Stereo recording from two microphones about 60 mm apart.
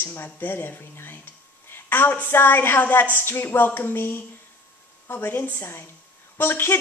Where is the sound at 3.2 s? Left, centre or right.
Left.